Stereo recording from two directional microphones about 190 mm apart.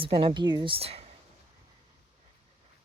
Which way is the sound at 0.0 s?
30° right (ahead or behind).